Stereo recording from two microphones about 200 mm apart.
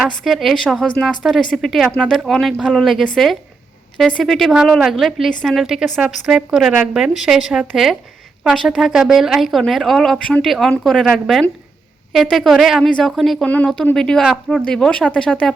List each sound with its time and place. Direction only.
0.3 s speech: centre (ahead or behind)
4.2 s speech: centre (ahead or behind)